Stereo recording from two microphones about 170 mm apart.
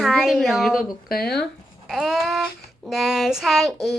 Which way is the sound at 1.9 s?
Centre (ahead or behind).